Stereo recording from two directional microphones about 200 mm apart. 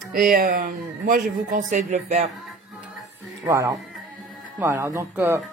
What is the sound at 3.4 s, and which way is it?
Speech, 15° right (ahead or behind).